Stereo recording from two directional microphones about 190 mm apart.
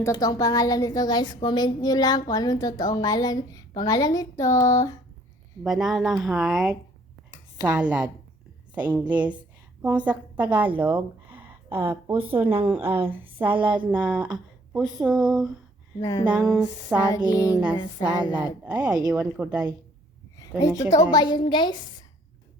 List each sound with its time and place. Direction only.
0.0 s a woman's voice: 20° left (ahead or behind)
5.6 s a woman's voice: centre (ahead or behind)
10.8 s a sound: 10° right (ahead or behind)
11.8 s a woman's voice: 10° right (ahead or behind)
12.9 s speech: 30° right (ahead or behind)
13.7 s speech: 5° right (ahead or behind)
16.0 s a sound: 15° left (ahead or behind)
16.2 s speech: 5° right (ahead or behind)
17.3 s a sound: 15° left (ahead or behind)
18.0 s a woman's voice: 5° right (ahead or behind)
20.4 s a woman's voice: 15° left (ahead or behind)